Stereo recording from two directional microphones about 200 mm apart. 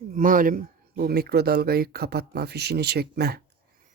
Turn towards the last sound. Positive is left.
turn(degrees=-50)  # may be behind; listen again after turning